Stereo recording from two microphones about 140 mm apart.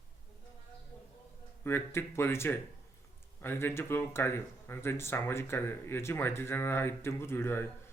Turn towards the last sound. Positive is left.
turn(degrees=15)  # may be behind; listen again after turning